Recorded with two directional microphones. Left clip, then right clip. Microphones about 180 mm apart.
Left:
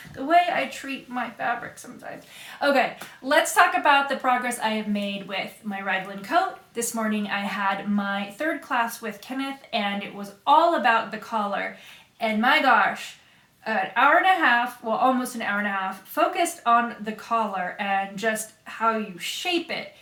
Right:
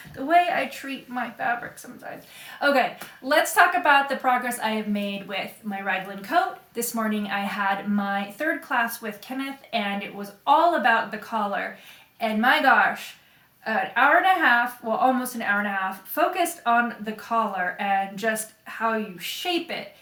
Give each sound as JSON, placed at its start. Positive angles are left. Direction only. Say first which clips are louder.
{"t": 0.3, "sound": "a woman's voice", "louder": "even", "side_deg": -5}
{"t": 2.6, "sound": "a woman's voice", "louder": "even", "side_deg": 0}